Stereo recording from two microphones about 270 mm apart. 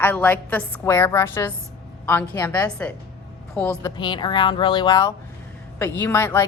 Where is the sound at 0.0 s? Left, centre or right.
Centre.